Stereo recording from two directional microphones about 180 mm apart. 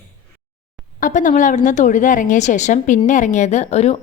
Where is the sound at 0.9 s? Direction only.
45° left (ahead or behind).